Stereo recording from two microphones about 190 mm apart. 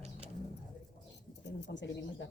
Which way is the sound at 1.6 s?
70° left (ahead or behind).